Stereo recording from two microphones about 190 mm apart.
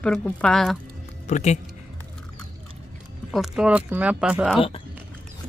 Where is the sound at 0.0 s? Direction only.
5° left (ahead or behind).